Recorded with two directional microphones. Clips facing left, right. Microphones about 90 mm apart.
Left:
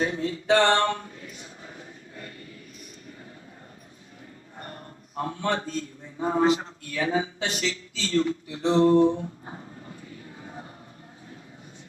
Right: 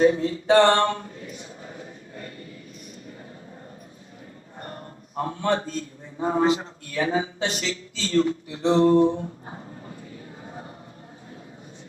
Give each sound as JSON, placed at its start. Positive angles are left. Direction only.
{"t": 0.0, "sound": "speech", "side_deg": -30}
{"t": 4.6, "sound": "a man's voice", "side_deg": -35}